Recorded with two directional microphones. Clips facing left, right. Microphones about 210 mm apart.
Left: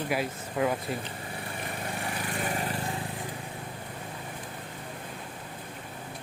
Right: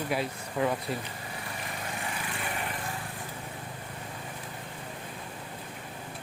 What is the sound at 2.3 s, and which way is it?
Lawn mower, 40° left (ahead or behind).